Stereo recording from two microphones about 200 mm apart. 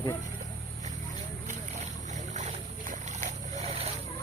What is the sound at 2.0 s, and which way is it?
Boat, 35° right (ahead or behind).